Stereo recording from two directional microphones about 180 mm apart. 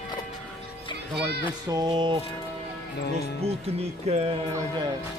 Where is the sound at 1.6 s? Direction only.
20° right (ahead or behind).